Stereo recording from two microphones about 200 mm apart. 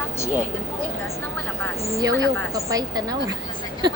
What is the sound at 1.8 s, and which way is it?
A woman's voice, 15° right (ahead or behind).